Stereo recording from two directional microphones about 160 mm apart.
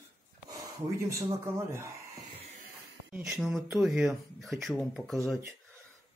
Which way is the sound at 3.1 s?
10° right (ahead or behind).